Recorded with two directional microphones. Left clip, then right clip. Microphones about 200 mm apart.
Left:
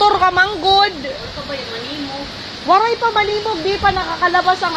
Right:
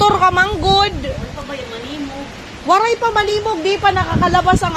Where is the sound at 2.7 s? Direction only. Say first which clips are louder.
Even; 20° right (ahead or behind).